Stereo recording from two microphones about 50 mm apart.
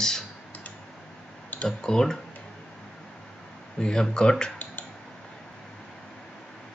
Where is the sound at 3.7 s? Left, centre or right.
Centre.